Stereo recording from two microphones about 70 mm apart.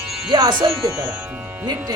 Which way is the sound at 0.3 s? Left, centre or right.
Right.